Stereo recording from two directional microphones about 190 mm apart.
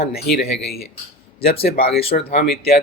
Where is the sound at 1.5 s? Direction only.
55° left (ahead or behind).